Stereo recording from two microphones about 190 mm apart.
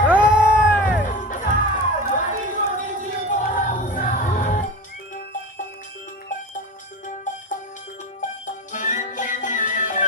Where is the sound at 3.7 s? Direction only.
45° left (ahead or behind).